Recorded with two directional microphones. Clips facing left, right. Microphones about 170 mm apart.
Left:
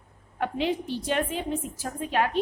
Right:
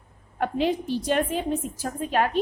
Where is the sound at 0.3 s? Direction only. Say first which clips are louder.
Right 3 dB; 45° right (ahead or behind).